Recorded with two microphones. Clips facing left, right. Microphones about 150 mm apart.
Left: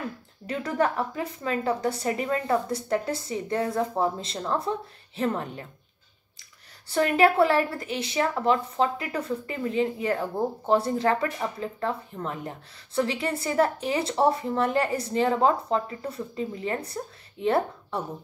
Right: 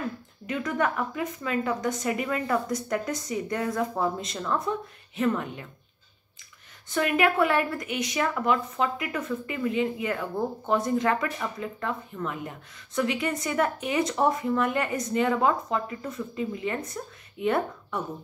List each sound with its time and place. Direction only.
0.5 s a woman's voice: 35° left (ahead or behind)
6.9 s a woman's voice: 35° left (ahead or behind)